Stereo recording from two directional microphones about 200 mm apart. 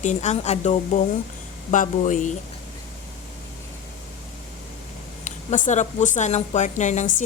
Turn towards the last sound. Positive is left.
turn(degrees=35)  # may be behind; listen again after turning